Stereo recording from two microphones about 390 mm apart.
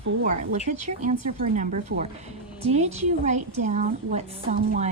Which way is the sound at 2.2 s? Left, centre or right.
Centre.